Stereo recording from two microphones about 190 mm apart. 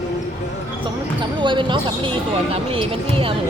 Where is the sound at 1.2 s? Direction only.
25° right (ahead or behind).